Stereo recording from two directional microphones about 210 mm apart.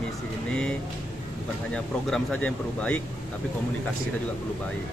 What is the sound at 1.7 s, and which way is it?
Speech, 5° left (ahead or behind).